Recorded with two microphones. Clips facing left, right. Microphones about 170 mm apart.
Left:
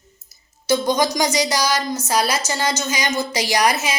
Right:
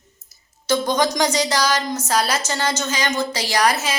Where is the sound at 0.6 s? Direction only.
10° left (ahead or behind).